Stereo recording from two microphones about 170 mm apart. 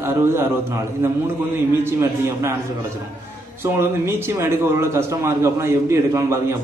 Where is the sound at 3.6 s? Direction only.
15° right (ahead or behind).